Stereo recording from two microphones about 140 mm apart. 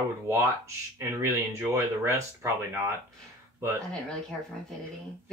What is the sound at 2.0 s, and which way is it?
Speech, 20° right (ahead or behind).